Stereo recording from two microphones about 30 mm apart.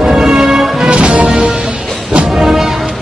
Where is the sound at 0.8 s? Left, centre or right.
Right.